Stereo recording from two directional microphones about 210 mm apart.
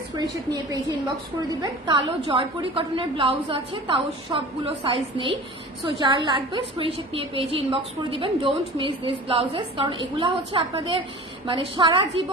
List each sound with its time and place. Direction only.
0.1 s a woman's voice: 15° right (ahead or behind)